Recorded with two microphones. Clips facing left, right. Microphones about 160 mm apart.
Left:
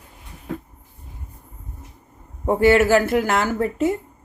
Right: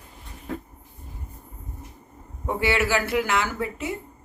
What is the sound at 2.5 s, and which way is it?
Speech, 45° left (ahead or behind).